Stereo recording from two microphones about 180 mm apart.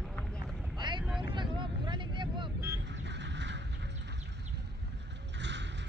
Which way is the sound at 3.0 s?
75° right (ahead or behind).